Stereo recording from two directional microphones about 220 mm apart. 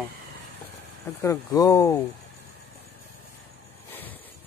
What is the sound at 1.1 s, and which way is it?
Speech, 15° left (ahead or behind).